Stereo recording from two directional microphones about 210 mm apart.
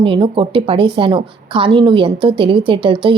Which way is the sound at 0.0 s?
25° right (ahead or behind).